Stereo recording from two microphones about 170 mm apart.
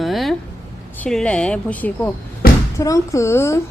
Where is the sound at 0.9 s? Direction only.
5° left (ahead or behind).